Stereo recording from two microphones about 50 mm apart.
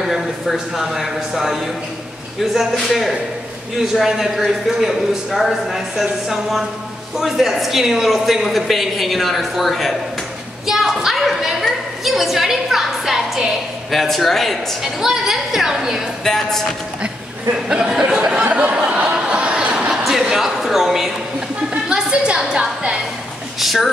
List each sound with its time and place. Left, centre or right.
0.0 s a woman's voice: centre
10.7 s a sound: centre
13.8 s a woman's voice: centre
14.8 s a woman's voice: centre
16.3 s speech: centre
17.6 s a woman's voice: centre
18.8 s a sound: right
19.9 s a sound: centre
20.2 s speech: centre
21.8 s a woman's voice: centre
23.6 s a woman's voice: centre